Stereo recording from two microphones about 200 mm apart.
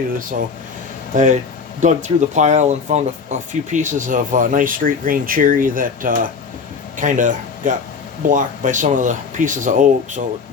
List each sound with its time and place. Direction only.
1.1 s speech: 40° right (ahead or behind)